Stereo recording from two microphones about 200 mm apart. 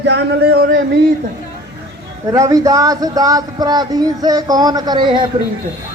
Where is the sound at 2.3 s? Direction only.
15° right (ahead or behind).